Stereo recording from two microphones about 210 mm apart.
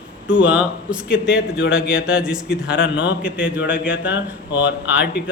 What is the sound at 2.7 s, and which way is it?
Speech, 60° left (ahead or behind).